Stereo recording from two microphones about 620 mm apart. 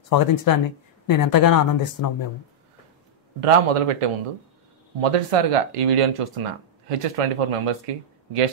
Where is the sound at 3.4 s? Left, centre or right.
Right.